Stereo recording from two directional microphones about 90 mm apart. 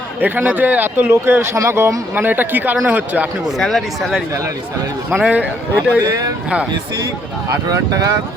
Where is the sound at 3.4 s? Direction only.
Centre (ahead or behind).